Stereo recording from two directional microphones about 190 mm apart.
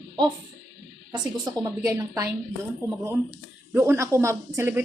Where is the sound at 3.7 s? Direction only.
15° right (ahead or behind).